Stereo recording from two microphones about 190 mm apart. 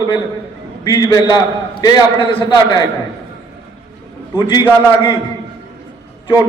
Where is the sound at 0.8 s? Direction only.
20° left (ahead or behind).